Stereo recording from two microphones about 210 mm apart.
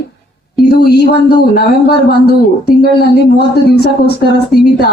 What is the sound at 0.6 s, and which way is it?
Speech, 50° left (ahead or behind).